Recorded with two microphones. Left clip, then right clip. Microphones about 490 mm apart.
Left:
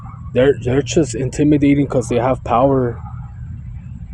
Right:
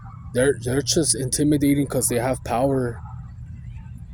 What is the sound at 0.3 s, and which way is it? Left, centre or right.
Speech, right.